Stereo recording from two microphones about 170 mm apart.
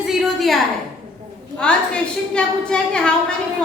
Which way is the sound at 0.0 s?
Centre (ahead or behind).